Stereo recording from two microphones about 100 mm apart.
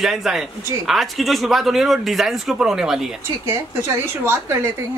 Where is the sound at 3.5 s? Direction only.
25° right (ahead or behind).